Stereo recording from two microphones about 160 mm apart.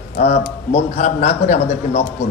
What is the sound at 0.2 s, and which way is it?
A man's voice, 45° left (ahead or behind).